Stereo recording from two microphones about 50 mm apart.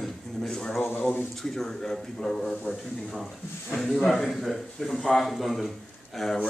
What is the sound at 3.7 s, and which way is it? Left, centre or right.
A man's voice, centre.